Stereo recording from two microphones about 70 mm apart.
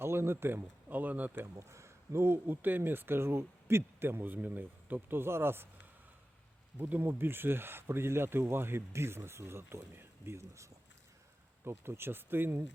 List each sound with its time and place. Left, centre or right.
0.0 s speech: right
1.5 s speech: right
6.7 s speech: right